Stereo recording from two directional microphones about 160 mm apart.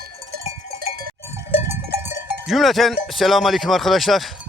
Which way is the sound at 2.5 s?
Centre (ahead or behind).